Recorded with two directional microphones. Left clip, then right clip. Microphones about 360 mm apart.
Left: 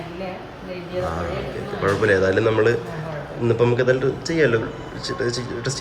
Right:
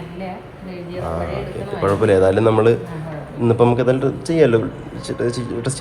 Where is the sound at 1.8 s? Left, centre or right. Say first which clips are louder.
Right 4 dB; centre.